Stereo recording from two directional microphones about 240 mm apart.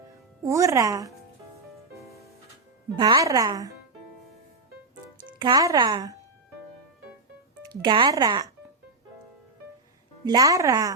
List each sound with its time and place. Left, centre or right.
0.1 s speech: centre
2.9 s speech: centre
5.4 s speech: centre
7.6 s speech: centre
10.2 s speech: centre